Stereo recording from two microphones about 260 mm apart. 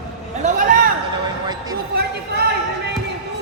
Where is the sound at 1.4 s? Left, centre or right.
Centre.